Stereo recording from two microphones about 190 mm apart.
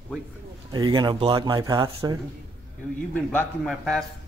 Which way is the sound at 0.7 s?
20° right (ahead or behind).